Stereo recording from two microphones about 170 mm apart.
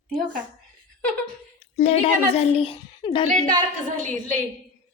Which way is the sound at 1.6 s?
35° left (ahead or behind).